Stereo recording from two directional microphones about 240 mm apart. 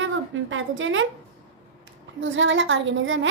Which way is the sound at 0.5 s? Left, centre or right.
Right.